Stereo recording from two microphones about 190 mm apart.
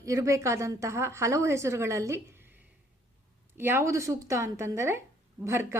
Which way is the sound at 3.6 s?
10° right (ahead or behind).